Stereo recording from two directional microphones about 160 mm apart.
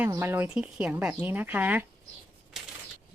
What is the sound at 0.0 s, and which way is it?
Speech, 15° right (ahead or behind).